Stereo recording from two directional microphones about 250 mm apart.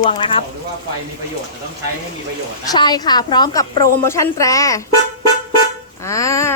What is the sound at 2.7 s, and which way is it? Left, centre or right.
Speech, centre.